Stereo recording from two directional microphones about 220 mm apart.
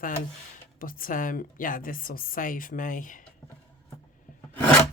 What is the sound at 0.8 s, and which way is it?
Speech, 40° left (ahead or behind).